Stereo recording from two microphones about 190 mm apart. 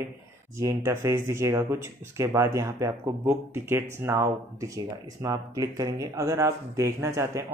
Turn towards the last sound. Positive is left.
turn(degrees=-15)  # may be behind; listen again after turning